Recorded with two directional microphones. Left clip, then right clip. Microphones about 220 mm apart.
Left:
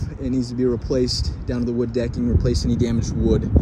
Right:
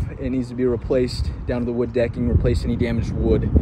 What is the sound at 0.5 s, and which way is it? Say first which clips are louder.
Speech: right 2 dB; 10° left (ahead or behind).